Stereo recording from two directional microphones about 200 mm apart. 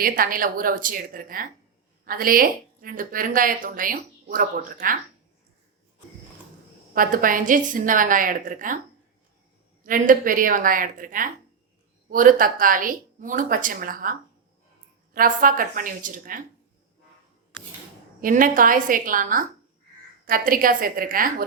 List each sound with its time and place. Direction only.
0.0 s a woman's voice: 45° right (ahead or behind)
6.9 s a woman's voice: 45° right (ahead or behind)
9.8 s a woman's voice: 45° right (ahead or behind)
18.2 s a woman's voice: 45° right (ahead or behind)